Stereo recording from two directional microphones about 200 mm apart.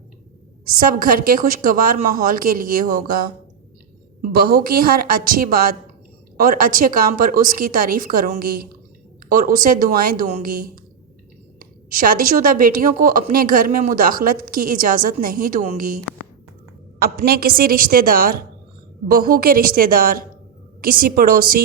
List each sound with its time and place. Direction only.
0.6 s a woman's voice: 45° right (ahead or behind)
17.0 s a woman's voice: 50° right (ahead or behind)